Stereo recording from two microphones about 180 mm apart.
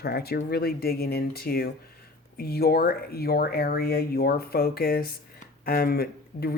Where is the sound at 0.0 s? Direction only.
60° left (ahead or behind).